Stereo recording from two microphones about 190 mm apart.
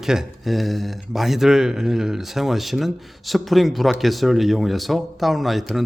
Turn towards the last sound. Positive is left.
turn(degrees=0)  # may be behind; listen again after turning